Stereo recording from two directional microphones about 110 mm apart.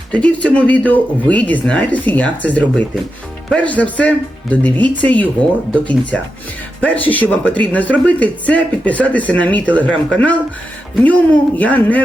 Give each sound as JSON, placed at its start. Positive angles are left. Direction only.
{"t": 0.1, "sound": "speech", "side_deg": 10}